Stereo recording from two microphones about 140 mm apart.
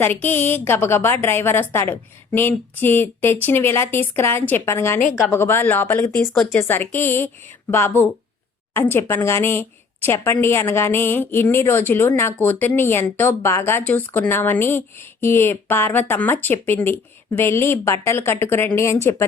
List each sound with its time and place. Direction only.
0.0 s a woman's voice: 15° left (ahead or behind)